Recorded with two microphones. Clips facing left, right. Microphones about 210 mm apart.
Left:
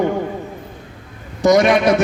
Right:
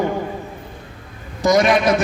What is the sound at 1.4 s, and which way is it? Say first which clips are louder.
Speech: left 2 dB; 70° left (ahead or behind).